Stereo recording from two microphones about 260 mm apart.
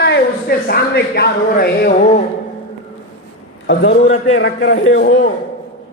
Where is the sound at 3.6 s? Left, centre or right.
Left.